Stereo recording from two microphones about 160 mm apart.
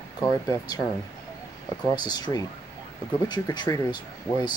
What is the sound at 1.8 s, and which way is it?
Speech, 25° left (ahead or behind).